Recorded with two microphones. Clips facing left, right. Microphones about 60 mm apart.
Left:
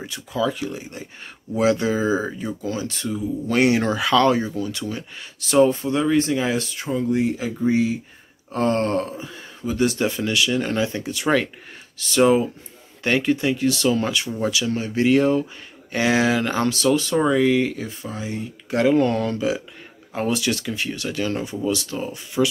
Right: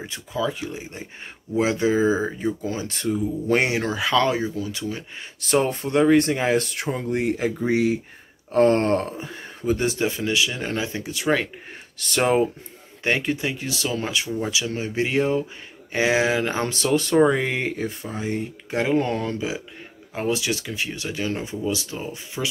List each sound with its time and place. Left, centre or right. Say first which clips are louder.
0.0 s speech: left 2 dB; centre
2.9 s speech: right 1 dB; right
3.8 s speech: left 3 dB; centre
5.4 s speech: left 5 dB; right
8.5 s speech: right 3 dB; right
9.8 s speech: left 1 dB; centre
12.2 s speech: left 3 dB; right
13.0 s speech: left 3 dB; centre
16.6 s speech: left 3 dB; right
18.7 s speech: left 5 dB; centre
18.9 s speech: left 3 dB; centre